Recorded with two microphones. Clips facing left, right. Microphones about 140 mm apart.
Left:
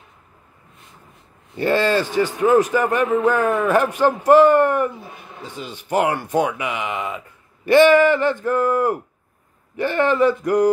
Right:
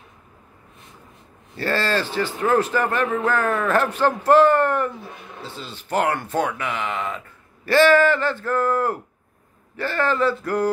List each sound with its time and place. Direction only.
1.6 s speech: 15° left (ahead or behind)